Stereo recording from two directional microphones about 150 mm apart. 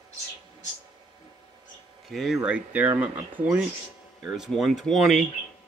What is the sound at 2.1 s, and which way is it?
Speech, centre (ahead or behind).